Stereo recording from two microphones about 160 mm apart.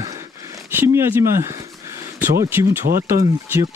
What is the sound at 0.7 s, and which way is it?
Speech, 15° right (ahead or behind).